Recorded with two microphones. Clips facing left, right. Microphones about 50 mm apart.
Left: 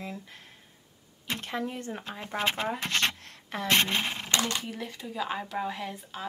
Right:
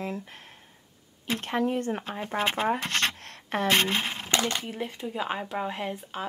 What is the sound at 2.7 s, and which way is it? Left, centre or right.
Scratch, right.